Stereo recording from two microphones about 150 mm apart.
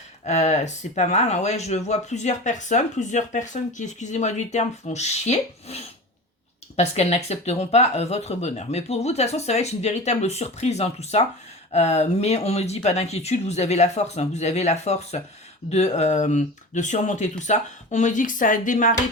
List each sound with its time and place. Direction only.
0.3 s speech: 50° left (ahead or behind)